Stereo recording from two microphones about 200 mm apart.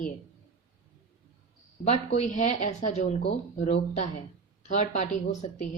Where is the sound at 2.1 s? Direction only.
40° left (ahead or behind).